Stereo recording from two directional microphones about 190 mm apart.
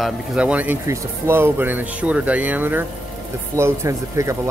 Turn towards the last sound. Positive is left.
turn(degrees=-15)  # may be behind; listen again after turning